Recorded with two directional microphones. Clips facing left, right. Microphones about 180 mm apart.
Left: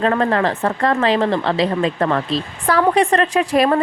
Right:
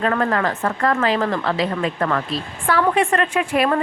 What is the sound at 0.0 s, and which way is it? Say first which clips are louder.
Speech: left 3 dB; 30° left (ahead or behind).